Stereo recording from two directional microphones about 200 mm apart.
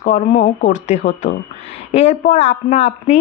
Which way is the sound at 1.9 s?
35° left (ahead or behind).